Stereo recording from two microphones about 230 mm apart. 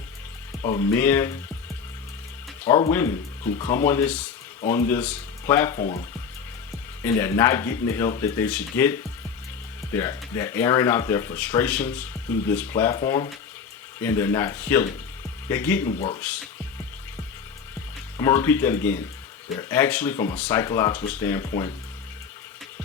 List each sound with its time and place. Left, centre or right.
0.6 s speech: centre
2.6 s speech: centre
5.8 s speech: left
7.0 s speech: centre
16.0 s speech: left
18.2 s speech: centre